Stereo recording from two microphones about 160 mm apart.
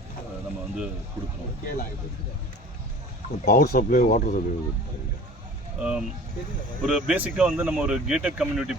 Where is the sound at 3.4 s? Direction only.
70° left (ahead or behind).